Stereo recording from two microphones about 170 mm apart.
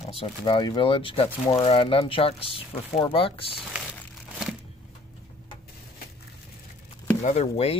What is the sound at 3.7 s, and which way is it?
Crumpling, 5° right (ahead or behind).